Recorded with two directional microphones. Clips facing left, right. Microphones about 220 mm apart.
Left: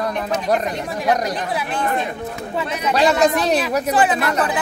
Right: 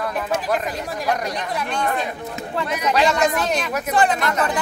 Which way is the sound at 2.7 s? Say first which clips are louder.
Left 2 dB; 30° left (ahead or behind).